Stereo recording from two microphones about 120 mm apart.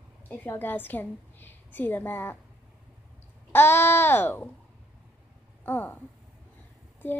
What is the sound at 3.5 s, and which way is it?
Speech, 20° left (ahead or behind).